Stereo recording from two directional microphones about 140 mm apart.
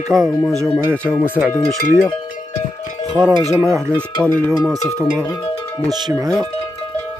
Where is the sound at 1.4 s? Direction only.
5° right (ahead or behind).